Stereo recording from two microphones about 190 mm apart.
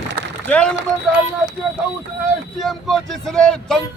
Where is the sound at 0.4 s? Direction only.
5° left (ahead or behind).